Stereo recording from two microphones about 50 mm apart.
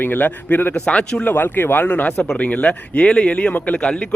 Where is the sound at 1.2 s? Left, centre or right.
Left.